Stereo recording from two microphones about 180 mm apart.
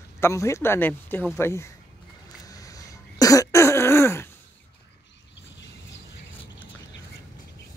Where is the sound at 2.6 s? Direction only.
20° left (ahead or behind).